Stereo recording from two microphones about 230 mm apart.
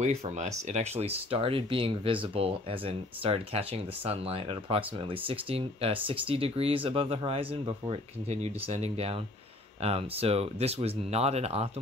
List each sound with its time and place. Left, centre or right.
0.0 s speech: right